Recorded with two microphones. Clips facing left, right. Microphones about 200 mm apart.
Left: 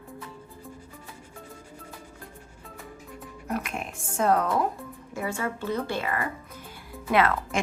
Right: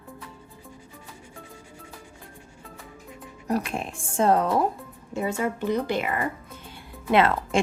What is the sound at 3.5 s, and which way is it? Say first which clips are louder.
A woman's voice: right 5 dB; 35° right (ahead or behind).